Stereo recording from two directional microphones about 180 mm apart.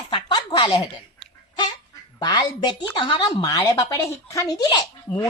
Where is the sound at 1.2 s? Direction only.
Centre (ahead or behind).